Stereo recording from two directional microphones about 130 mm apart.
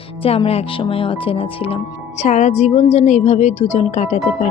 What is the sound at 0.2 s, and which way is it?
Speech, 50° left (ahead or behind).